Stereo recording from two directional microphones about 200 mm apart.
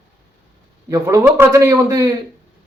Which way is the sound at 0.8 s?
15° right (ahead or behind).